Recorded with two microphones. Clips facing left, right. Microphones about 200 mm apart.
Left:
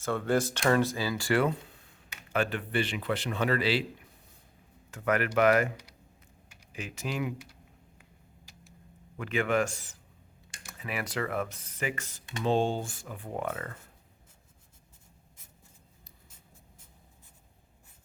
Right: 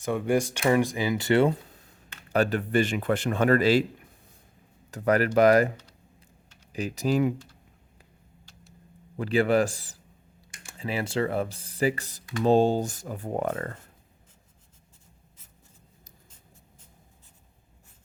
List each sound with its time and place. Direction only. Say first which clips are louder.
0.0 s speech: right 3 dB; 15° right (ahead or behind)
2.3 s speech: right 6 dB; 40° right (ahead or behind)
4.9 s speech: right 5 dB; 35° right (ahead or behind)
6.7 s speech: right 9 dB; 35° right (ahead or behind)
9.1 s speech: right 6 dB; 35° right (ahead or behind)